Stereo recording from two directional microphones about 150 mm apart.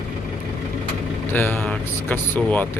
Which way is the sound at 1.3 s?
10° left (ahead or behind).